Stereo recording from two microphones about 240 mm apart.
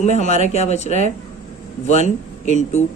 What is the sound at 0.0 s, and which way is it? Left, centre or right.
A man's voice, left.